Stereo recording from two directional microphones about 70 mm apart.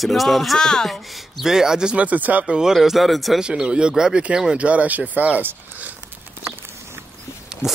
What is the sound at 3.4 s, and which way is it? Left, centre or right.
Speech, centre.